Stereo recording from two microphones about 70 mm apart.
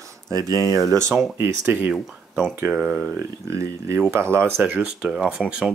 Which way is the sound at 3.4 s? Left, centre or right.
Right.